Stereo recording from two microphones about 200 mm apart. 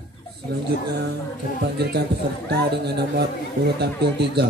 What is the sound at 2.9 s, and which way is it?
Speech, 55° right (ahead or behind).